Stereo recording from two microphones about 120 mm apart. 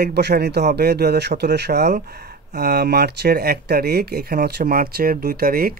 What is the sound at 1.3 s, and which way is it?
Speech, 90° right.